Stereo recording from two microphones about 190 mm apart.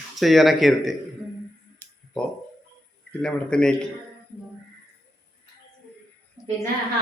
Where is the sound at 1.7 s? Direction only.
5° left (ahead or behind).